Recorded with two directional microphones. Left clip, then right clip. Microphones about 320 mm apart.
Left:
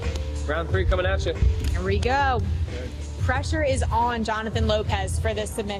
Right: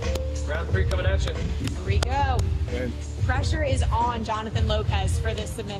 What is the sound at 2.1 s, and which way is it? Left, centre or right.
A woman's voice, left.